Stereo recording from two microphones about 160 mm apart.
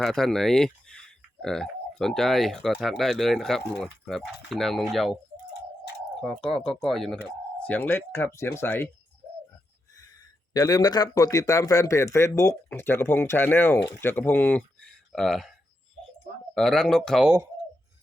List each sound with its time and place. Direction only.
0.0 s speech: centre (ahead or behind)
6.1 s speech: 5° left (ahead or behind)
10.5 s speech: 25° left (ahead or behind); by 15.5 s centre (ahead or behind)
16.6 s speech: centre (ahead or behind)